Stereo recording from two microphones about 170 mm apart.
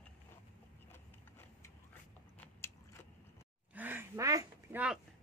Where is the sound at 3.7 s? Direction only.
10° right (ahead or behind).